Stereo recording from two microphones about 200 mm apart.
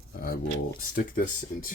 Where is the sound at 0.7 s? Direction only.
45° left (ahead or behind).